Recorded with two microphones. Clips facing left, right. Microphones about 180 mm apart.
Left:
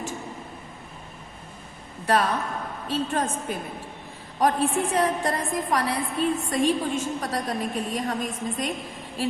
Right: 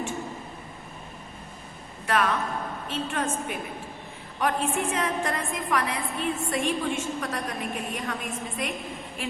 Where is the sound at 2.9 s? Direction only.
35° left (ahead or behind).